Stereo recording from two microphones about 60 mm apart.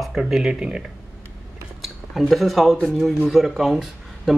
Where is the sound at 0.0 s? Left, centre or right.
Centre.